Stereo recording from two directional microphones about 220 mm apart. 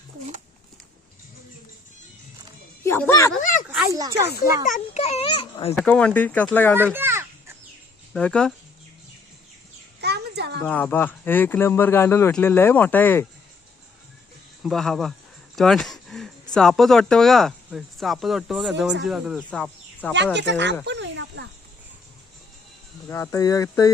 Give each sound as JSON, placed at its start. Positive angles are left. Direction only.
{"t": 2.8, "sound": "speech", "side_deg": 10}
{"t": 3.7, "sound": "speech", "side_deg": -10}
{"t": 4.6, "sound": "a child's voice", "side_deg": 35}
{"t": 5.7, "sound": "speech", "side_deg": 5}
{"t": 6.7, "sound": "a sound", "side_deg": -10}
{"t": 8.1, "sound": "speech", "side_deg": 5}
{"t": 10.0, "sound": "a sound", "side_deg": -50}
{"t": 10.6, "sound": "speech", "side_deg": 10}
{"t": 14.6, "sound": "speech", "side_deg": 0}
{"t": 15.5, "sound": "a sound", "side_deg": 0}
{"t": 16.6, "sound": "speech", "side_deg": 0}
{"t": 20.3, "sound": "speech", "side_deg": -55}
{"t": 20.8, "sound": "a sound", "side_deg": -55}
{"t": 23.0, "sound": "speech", "side_deg": 10}